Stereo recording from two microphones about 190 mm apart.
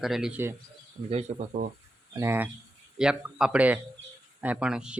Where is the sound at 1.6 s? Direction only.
55° right (ahead or behind).